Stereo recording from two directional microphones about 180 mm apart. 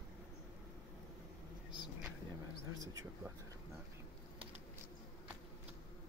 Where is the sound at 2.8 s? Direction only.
20° right (ahead or behind).